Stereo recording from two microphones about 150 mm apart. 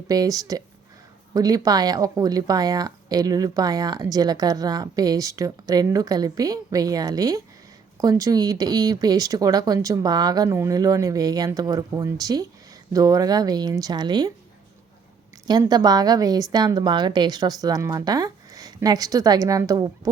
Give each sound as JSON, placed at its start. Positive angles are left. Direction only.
{"t": 0.1, "sound": "speech", "side_deg": -25}
{"t": 15.4, "sound": "speech", "side_deg": -25}